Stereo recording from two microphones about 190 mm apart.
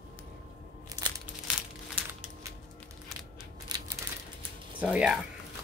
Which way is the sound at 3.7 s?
20° right (ahead or behind).